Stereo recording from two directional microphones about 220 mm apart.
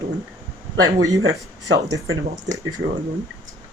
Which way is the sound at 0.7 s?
70° right (ahead or behind).